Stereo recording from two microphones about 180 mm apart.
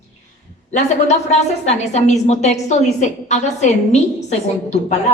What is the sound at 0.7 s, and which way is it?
A woman's voice, 40° left (ahead or behind).